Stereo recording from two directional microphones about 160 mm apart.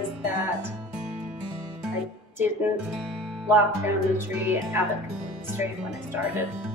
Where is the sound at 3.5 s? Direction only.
15° right (ahead or behind).